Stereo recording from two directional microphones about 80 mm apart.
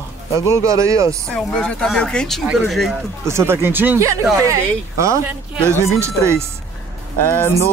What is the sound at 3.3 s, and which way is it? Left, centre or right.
Speech, right.